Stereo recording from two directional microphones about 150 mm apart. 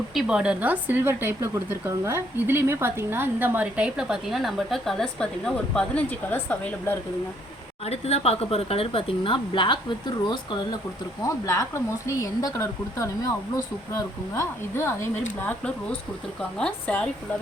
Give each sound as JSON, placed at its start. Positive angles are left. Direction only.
{"t": 0.1, "sound": "speech", "side_deg": -5}
{"t": 7.9, "sound": "speech", "side_deg": 45}
{"t": 11.3, "sound": "speech", "side_deg": 20}
{"t": 14.3, "sound": "speech", "side_deg": 15}